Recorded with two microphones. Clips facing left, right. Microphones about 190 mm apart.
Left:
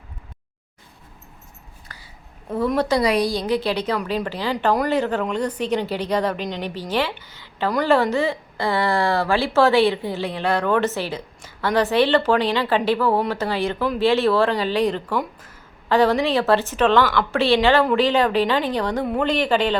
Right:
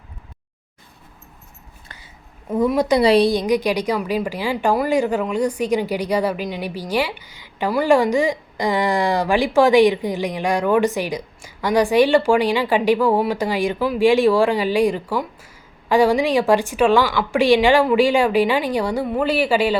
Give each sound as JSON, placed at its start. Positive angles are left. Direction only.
{"t": 1.9, "sound": "a sound", "side_deg": -20}
{"t": 2.5, "sound": "a woman's voice", "side_deg": -10}
{"t": 3.0, "sound": "a woman's voice", "side_deg": -30}